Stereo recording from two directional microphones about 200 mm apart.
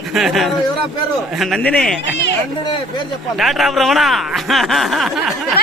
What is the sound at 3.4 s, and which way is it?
Speech, centre (ahead or behind).